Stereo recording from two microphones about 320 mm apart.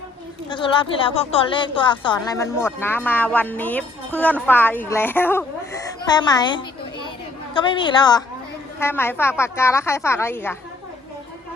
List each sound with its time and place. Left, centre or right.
0.5 s a woman's voice: centre